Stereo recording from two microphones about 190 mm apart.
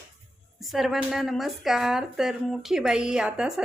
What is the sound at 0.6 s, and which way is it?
A woman's voice, centre (ahead or behind).